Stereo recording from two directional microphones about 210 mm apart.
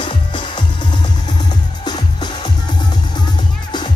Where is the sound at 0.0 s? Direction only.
20° left (ahead or behind).